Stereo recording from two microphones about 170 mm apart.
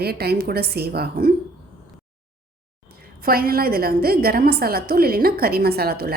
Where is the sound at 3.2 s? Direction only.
60° right (ahead or behind).